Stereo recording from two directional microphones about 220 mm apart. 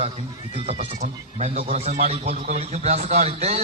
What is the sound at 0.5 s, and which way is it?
Speech, 30° right (ahead or behind).